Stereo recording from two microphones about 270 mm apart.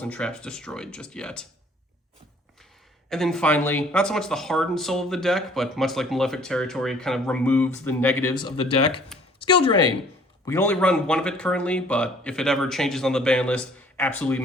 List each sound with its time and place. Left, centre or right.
0.0 s speech: centre
3.1 s speech: centre